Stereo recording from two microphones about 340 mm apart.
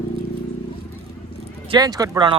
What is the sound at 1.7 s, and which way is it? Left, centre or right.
Speech, centre.